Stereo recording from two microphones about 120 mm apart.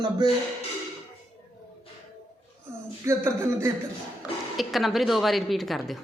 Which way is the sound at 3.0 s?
20° right (ahead or behind).